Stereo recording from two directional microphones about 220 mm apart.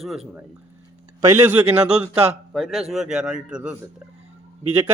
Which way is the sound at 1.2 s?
10° right (ahead or behind).